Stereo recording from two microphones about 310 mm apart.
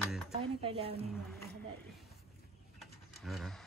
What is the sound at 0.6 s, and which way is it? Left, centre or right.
Speech, centre.